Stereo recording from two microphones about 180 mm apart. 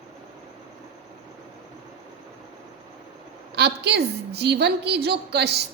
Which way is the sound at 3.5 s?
70° right (ahead or behind).